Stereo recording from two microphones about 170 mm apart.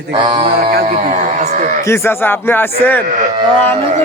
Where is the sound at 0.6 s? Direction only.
65° right (ahead or behind).